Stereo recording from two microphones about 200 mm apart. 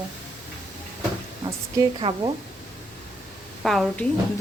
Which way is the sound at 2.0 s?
25° right (ahead or behind).